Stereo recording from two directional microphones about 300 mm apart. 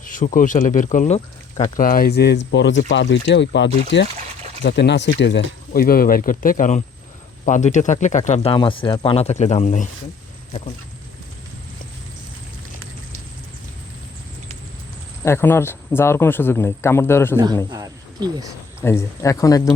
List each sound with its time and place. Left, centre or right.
0.0 s speech: left
15.2 s speech: centre
17.7 s speech: centre
18.8 s speech: centre